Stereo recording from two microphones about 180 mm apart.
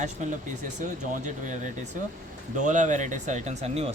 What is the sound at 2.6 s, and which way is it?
Speech, 45° right (ahead or behind).